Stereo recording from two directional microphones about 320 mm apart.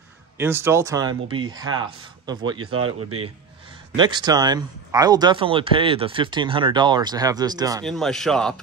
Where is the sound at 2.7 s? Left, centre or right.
Right.